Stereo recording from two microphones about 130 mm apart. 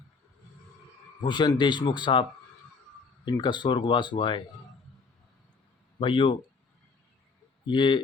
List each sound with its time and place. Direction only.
1.2 s speech: 35° left (ahead or behind)
3.2 s speech: 35° left (ahead or behind)
6.0 s speech: 40° left (ahead or behind)
7.7 s speech: 40° left (ahead or behind)